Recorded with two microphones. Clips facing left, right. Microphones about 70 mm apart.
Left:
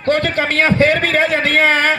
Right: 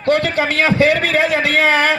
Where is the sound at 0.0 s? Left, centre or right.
Left.